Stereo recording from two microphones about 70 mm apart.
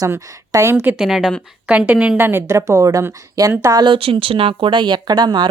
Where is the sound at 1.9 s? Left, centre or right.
Centre.